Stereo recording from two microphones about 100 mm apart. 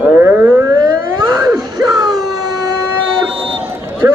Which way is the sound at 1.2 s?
40° right (ahead or behind).